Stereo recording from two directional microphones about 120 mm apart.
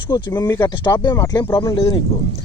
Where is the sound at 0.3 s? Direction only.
30° left (ahead or behind).